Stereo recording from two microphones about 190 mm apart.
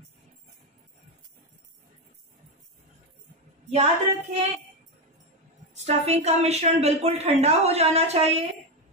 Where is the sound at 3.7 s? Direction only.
35° right (ahead or behind).